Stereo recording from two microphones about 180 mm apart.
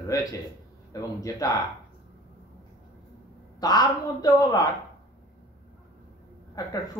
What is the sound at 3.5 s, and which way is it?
Speech, 20° left (ahead or behind).